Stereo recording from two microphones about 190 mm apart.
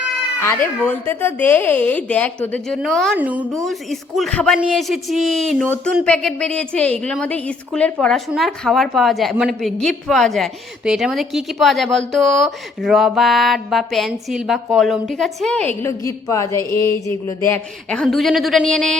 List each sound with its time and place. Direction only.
0.4 s a woman's voice: 10° left (ahead or behind)